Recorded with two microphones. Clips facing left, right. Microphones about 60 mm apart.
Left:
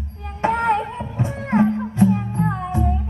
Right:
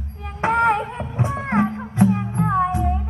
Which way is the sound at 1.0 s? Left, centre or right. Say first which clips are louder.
Right 1 dB; right.